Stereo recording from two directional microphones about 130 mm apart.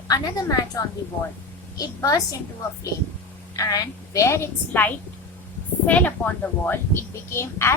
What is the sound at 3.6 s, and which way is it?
Speech, 25° left (ahead or behind).